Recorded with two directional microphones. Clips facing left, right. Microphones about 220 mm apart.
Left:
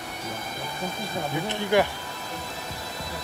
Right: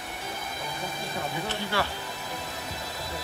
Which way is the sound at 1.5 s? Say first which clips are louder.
Left 10 dB; 15° left (ahead or behind).